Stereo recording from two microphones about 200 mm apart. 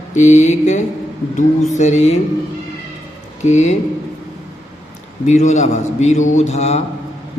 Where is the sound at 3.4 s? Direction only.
35° left (ahead or behind).